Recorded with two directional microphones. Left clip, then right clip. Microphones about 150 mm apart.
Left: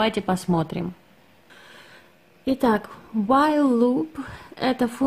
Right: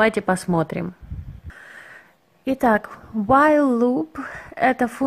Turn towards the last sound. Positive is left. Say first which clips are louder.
# right 5 dB
turn(degrees=-30)  # may be behind; listen again after turning